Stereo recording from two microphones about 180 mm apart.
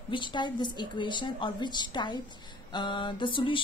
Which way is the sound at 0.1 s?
25° left (ahead or behind).